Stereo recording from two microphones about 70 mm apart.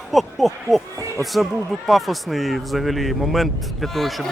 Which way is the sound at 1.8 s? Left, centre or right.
Centre.